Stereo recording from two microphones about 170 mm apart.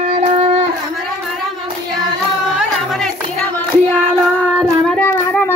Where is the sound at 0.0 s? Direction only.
40° right (ahead or behind).